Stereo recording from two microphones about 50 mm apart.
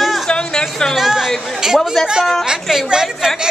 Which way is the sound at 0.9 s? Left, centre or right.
Centre.